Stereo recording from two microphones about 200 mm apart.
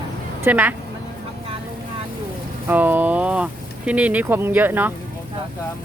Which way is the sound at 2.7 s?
10° right (ahead or behind).